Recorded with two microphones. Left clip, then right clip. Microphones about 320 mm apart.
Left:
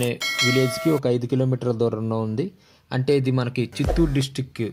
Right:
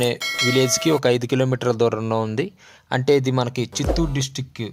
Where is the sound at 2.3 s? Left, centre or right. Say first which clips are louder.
Right 3 dB; right.